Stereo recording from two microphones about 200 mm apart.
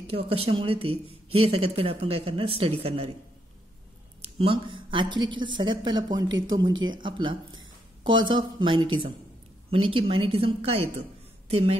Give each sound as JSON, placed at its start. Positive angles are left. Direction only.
{"t": 0.0, "sound": "speech", "side_deg": -30}
{"t": 4.2, "sound": "a woman's voice", "side_deg": -30}